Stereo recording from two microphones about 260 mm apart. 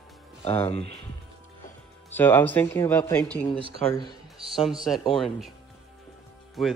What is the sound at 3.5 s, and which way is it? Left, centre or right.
Speech, centre.